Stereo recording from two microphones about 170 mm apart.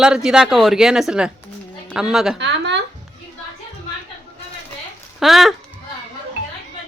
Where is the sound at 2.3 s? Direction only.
90° right.